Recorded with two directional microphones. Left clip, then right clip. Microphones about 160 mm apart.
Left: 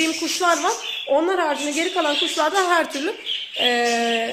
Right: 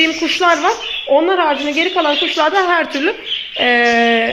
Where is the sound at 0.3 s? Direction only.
25° left (ahead or behind).